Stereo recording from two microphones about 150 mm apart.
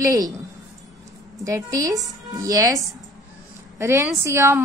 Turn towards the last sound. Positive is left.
turn(degrees=-20)  # may be behind; listen again after turning